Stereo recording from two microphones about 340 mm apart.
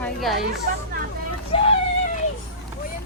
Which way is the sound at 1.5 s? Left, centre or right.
Centre.